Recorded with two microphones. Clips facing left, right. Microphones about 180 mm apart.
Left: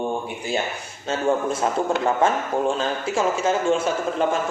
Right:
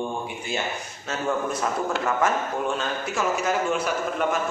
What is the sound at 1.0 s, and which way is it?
A man's voice, 25° left (ahead or behind).